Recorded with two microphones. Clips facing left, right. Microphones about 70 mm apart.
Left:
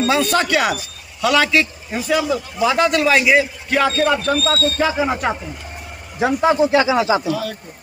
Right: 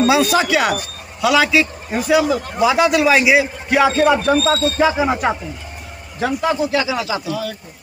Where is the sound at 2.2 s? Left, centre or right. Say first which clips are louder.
Right 2 dB; right.